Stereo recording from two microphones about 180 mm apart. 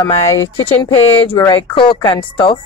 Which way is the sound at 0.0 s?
15° left (ahead or behind).